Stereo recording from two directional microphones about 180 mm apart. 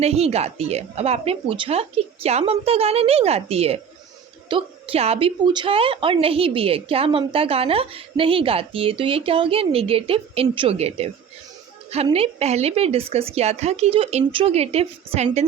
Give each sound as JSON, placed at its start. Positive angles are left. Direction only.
{"t": 0.0, "sound": "a woman's voice", "side_deg": -35}